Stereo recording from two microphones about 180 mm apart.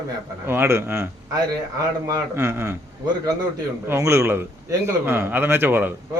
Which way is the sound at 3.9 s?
15° right (ahead or behind).